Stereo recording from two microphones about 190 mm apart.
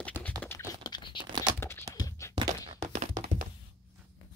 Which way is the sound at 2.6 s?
40° right (ahead or behind).